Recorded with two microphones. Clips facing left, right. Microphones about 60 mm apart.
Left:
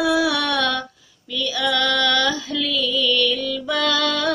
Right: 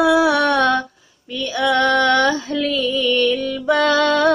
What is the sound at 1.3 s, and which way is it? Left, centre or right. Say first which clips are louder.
Female singing: right 4 dB; right.